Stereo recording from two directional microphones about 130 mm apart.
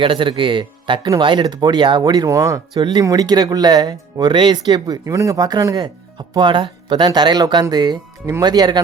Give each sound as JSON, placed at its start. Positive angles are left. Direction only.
{"t": 0.0, "sound": "speech", "side_deg": -40}